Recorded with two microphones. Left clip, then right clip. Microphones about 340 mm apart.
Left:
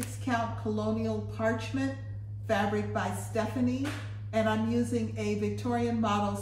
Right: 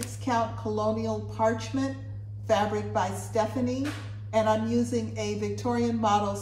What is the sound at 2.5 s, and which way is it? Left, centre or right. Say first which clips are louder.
Speech: right 4 dB; centre.